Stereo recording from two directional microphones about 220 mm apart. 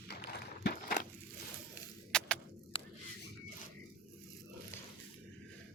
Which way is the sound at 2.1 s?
5° left (ahead or behind).